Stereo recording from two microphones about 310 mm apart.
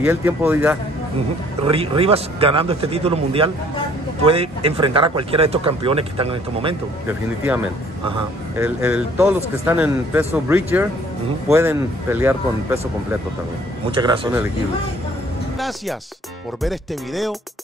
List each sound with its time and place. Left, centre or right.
0.0 s speech: centre
1.7 s speech: centre
8.5 s speech: centre
13.8 s speech: centre
16.6 s speech: centre